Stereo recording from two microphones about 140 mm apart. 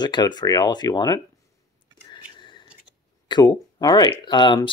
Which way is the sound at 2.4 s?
35° left (ahead or behind).